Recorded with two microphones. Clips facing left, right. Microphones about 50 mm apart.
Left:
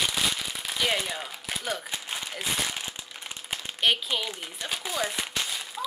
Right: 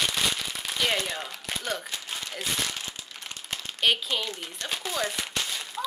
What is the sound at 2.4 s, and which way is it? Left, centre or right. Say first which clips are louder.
Speech: even; centre.